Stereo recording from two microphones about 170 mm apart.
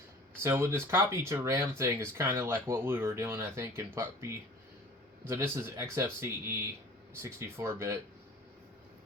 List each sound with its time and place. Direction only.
0.4 s speech: 15° right (ahead or behind)